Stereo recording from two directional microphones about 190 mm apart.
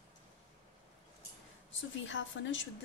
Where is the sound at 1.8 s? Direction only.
85° left.